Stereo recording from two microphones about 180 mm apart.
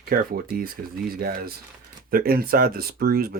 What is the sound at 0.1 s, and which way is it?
Speech, 55° right (ahead or behind).